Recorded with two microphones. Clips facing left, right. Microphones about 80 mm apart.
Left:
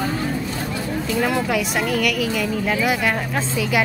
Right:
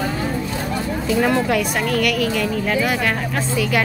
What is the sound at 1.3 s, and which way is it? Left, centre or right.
Speech, centre.